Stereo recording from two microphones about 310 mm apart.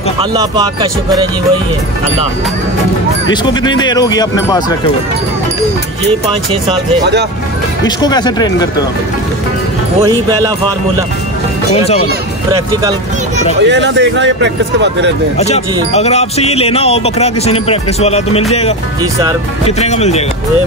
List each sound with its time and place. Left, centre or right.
0.3 s speech: centre
3.4 s speech: centre
7.8 s speech: centre
10.0 s speech: centre
11.7 s speech: centre
13.6 s speech: right
15.3 s speech: left
19.6 s speech: left